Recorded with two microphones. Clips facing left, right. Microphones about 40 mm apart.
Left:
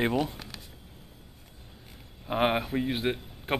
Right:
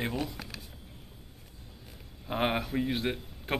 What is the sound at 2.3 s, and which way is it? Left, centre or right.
A man's voice, centre.